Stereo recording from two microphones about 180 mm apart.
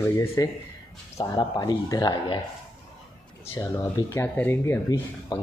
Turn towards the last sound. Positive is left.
turn(degrees=20)  # may be behind; listen again after turning